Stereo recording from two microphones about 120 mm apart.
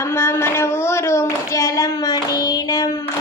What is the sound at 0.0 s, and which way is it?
Clapping, 20° left (ahead or behind).